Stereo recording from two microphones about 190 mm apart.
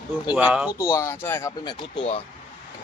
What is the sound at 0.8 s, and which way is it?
Speech, 15° left (ahead or behind).